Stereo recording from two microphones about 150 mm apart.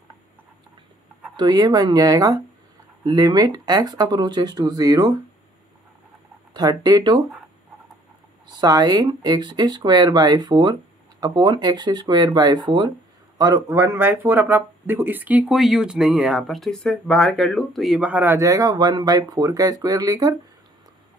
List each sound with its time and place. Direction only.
1.3 s speech: 25° right (ahead or behind)
6.5 s speech: 25° right (ahead or behind)
8.5 s speech: 25° right (ahead or behind)